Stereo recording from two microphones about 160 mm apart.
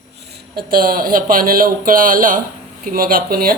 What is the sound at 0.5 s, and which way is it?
Speech, 65° right (ahead or behind).